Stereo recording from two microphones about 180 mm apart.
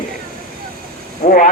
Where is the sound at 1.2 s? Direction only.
45° left (ahead or behind).